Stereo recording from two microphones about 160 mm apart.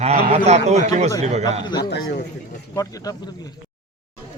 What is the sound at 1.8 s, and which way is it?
Speech, 90° left.